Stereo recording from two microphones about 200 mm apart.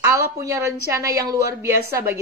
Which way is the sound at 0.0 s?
15° right (ahead or behind).